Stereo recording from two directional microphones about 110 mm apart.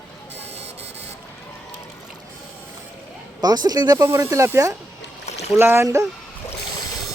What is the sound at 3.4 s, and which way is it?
Speech, 35° right (ahead or behind).